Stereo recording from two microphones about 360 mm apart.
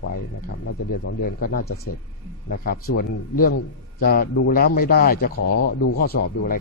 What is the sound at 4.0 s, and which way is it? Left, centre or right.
A man's voice, left.